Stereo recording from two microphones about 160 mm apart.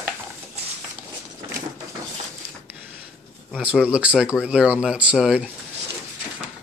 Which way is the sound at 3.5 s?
Centre (ahead or behind).